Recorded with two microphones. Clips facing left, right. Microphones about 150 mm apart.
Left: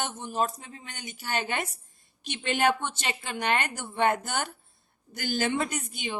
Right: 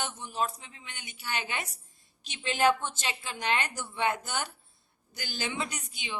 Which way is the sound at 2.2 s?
60° left (ahead or behind).